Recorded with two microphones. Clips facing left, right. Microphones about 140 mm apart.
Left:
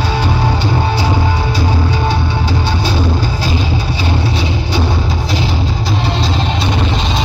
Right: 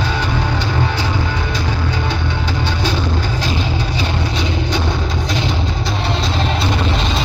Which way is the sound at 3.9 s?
10° left (ahead or behind).